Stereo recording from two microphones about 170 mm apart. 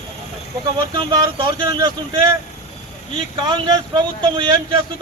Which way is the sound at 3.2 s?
30° right (ahead or behind).